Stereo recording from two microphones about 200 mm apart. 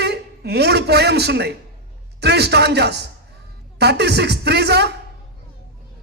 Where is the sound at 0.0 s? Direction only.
55° right (ahead or behind).